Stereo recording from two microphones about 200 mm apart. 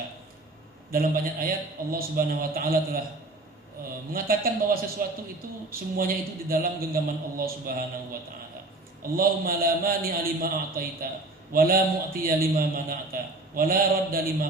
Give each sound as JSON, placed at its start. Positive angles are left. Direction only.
{"t": 0.9, "sound": "a man's voice", "side_deg": -45}
{"t": 4.1, "sound": "a man's voice", "side_deg": -45}
{"t": 9.1, "sound": "a man's voice", "side_deg": -45}